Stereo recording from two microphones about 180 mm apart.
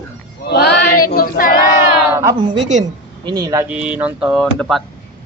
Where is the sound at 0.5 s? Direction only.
70° left (ahead or behind).